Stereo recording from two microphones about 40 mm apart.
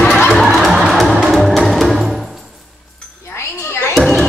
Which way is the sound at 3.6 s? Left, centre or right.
Left.